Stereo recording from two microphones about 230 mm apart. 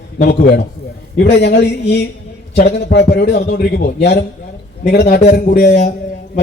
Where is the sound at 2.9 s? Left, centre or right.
Left.